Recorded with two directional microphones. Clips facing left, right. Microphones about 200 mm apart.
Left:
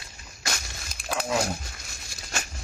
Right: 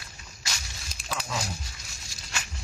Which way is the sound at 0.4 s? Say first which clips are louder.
Left 6 dB; 55° left (ahead or behind).